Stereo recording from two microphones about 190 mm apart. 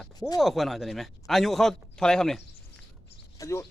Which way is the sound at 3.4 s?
15° left (ahead or behind).